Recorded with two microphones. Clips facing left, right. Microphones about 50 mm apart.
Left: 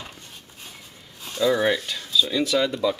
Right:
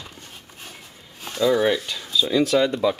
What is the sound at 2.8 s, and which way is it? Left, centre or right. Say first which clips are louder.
Speech: right 2 dB; centre.